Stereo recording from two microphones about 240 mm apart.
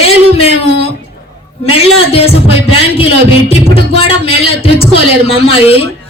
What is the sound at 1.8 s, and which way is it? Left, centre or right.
A man's voice, left.